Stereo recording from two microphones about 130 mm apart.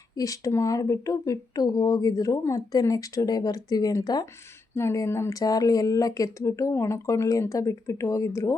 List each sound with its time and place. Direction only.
0.2 s speech: 25° left (ahead or behind)
4.7 s speech: 20° left (ahead or behind)